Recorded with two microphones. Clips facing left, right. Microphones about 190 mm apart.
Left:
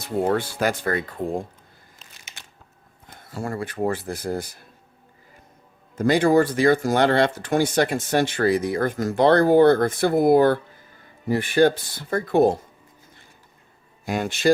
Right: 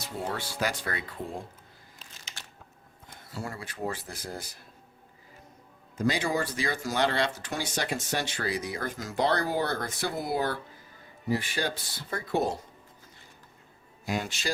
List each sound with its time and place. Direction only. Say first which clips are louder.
0.0 s speech: left 12 dB; 55° left (ahead or behind)
3.1 s speech: left 8 dB; 50° left (ahead or behind)
6.0 s speech: left 11 dB; 55° left (ahead or behind)
14.0 s speech: left 10 dB; 55° left (ahead or behind)